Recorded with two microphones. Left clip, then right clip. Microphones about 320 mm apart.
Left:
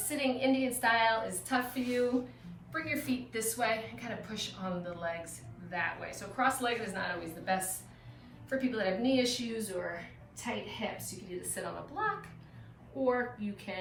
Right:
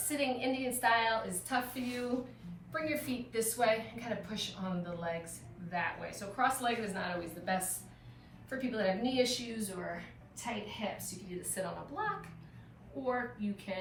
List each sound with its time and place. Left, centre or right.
0.1 s a woman's voice: centre
13.7 s a woman's voice: centre